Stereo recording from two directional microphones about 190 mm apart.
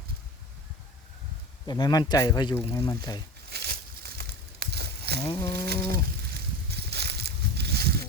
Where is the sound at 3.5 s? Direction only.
55° right (ahead or behind).